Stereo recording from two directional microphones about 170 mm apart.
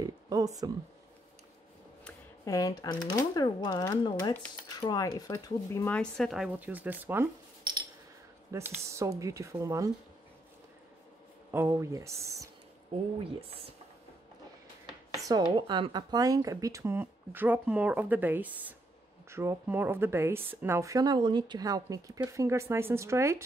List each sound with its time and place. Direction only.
0.0 s a sound: 20° right (ahead or behind)
2.4 s speech: 20° left (ahead or behind)
5.9 s speech: centre (ahead or behind)
8.5 s speech: 15° right (ahead or behind)
11.5 s speech: 15° right (ahead or behind)
15.2 s speech: 25° right (ahead or behind)